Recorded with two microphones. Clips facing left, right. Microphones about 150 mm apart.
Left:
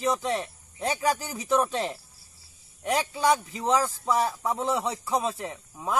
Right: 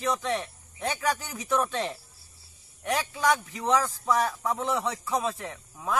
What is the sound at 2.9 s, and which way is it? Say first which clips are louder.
Speech: left 2 dB; 30° left (ahead or behind).